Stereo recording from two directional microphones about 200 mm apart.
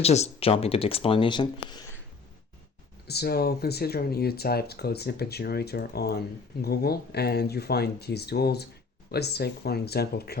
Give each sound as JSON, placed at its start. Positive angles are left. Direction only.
{"t": 0.0, "sound": "speech", "side_deg": 30}
{"t": 3.1, "sound": "speech", "side_deg": 50}